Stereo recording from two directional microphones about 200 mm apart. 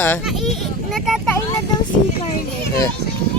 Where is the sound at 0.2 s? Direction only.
Centre (ahead or behind).